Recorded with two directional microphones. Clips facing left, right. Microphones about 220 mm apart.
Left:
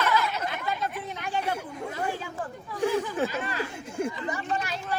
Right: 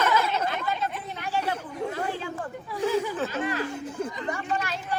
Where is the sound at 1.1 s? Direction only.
15° left (ahead or behind).